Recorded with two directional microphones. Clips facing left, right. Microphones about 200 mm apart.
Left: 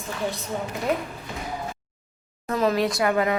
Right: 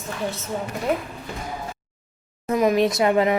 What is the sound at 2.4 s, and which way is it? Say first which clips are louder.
Speech: right 4 dB; 15° right (ahead or behind).